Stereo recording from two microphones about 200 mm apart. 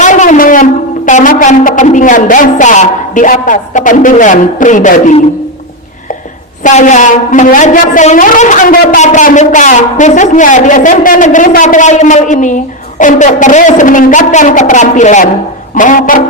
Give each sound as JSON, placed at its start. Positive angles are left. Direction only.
{"t": 0.0, "sound": "a woman's voice", "side_deg": 40}
{"t": 6.6, "sound": "a woman's voice", "side_deg": 40}